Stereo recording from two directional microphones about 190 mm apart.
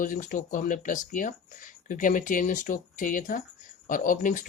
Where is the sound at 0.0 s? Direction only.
45° left (ahead or behind).